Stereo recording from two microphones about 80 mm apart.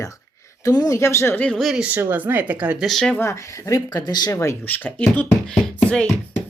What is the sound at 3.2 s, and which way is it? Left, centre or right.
Speech, left.